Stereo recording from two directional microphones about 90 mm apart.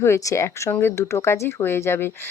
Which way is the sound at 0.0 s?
30° left (ahead or behind).